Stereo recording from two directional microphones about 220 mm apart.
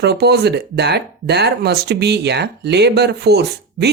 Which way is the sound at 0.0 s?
50° right (ahead or behind).